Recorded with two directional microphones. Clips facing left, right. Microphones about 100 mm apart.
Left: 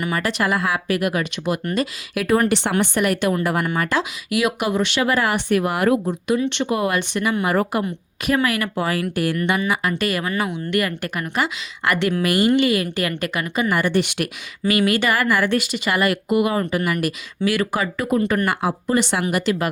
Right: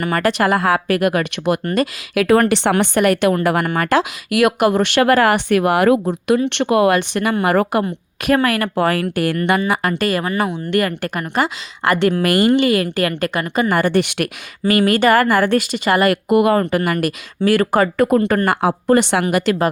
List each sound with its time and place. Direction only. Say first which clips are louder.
0.0 s a woman's voice: right 5 dB; 55° right (ahead or behind)
2.1 s a woman's voice: right 5 dB; 90° right
6.5 s a woman's voice: right 7 dB; 70° right (ahead or behind)
8.3 s a woman's voice: right 4 dB; 45° right (ahead or behind)
9.6 s speech: right 3 dB; 40° right (ahead or behind)
12.2 s a woman's voice: right 4 dB; 55° right (ahead or behind)
12.5 s speech: right 3 dB; 35° right (ahead or behind); by 14.3 s 55° right (ahead or behind)
14.6 s a woman's voice: right 5 dB; 40° right (ahead or behind); by 19.1 s 55° right (ahead or behind)
19.1 s a woman's voice: right 5 dB; 75° right (ahead or behind)
19.4 s speech: right 4 dB; 40° right (ahead or behind)